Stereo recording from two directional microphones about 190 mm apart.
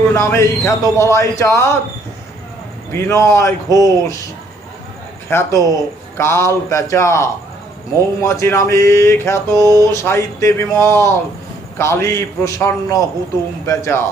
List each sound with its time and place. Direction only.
0.1 s a man's voice: 15° left (ahead or behind)
2.9 s a man's voice: 15° left (ahead or behind)
5.3 s a man's voice: 15° left (ahead or behind)